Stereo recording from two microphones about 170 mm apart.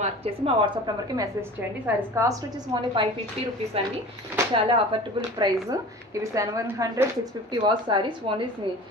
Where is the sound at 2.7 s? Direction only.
25° right (ahead or behind).